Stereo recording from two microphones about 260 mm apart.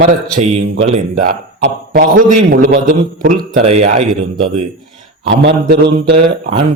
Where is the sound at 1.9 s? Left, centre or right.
Right.